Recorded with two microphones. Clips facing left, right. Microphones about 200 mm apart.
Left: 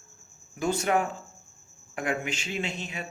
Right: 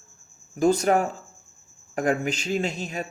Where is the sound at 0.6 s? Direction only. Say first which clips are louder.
Right 6 dB; 40° right (ahead or behind).